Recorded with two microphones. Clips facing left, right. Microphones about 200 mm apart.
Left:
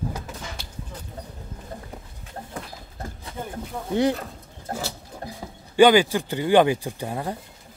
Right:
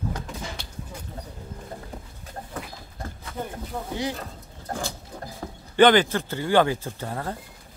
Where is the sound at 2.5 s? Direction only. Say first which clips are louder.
Right 1 dB; 10° left (ahead or behind).